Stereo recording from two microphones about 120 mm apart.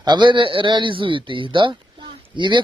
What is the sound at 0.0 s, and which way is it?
Speech, 40° right (ahead or behind).